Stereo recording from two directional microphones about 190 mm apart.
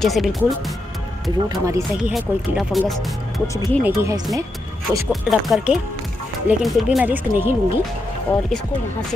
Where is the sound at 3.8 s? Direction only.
15° right (ahead or behind).